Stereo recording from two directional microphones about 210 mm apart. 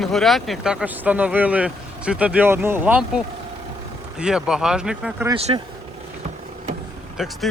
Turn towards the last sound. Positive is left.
turn(degrees=0)  # may be behind; listen again after turning